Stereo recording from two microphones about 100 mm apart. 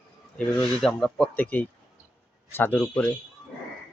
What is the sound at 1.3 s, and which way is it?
Speech, 15° left (ahead or behind).